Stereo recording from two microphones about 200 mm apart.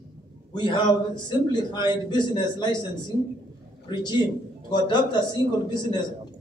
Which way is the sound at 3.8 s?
20° left (ahead or behind).